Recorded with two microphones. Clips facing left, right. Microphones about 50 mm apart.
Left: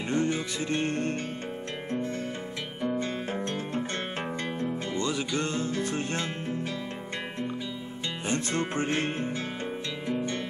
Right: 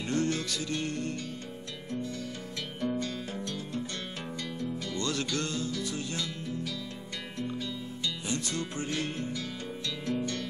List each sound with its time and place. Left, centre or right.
0.1 s music: left
0.7 s music: left
2.8 s music: left
3.3 s music: left
4.9 s music: centre; by 6.7 s left
8.3 s music: left
10.0 s music: left